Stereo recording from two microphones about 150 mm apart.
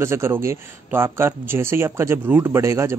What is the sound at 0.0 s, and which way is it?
Speech, 15° right (ahead or behind).